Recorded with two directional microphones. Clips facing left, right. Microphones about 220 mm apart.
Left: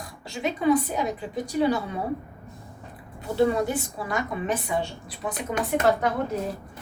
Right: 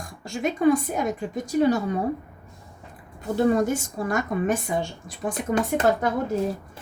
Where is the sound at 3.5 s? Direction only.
45° right (ahead or behind).